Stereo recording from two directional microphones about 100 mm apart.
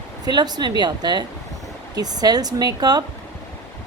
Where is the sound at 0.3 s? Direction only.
45° right (ahead or behind).